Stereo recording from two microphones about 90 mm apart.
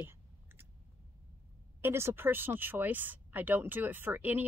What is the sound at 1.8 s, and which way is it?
Speech, 25° right (ahead or behind).